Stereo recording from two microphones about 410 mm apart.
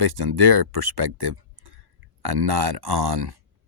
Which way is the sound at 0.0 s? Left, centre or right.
Right.